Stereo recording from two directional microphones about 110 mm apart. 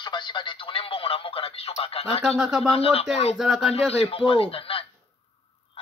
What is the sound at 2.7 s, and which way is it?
Speech, 60° left (ahead or behind).